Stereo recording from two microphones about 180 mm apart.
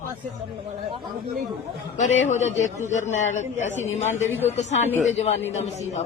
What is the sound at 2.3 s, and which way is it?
A man's voice, 40° left (ahead or behind).